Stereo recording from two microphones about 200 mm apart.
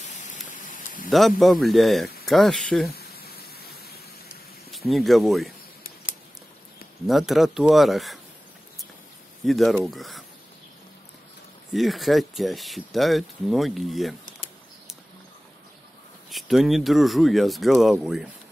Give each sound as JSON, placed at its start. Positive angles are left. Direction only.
{"t": 0.1, "sound": "rain", "side_deg": 35}
{"t": 0.5, "sound": "a sound", "side_deg": 40}
{"t": 1.1, "sound": "speech", "side_deg": 0}
{"t": 2.9, "sound": "a sound", "side_deg": 50}
{"t": 4.6, "sound": "speech", "side_deg": 0}
{"t": 7.1, "sound": "speech", "side_deg": 0}
{"t": 9.4, "sound": "speech", "side_deg": 0}
{"t": 11.7, "sound": "speech", "side_deg": 0}
{"t": 16.3, "sound": "speech", "side_deg": 0}